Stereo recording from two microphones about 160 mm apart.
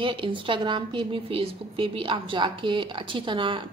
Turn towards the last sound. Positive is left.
turn(degrees=-30)  # may be behind; listen again after turning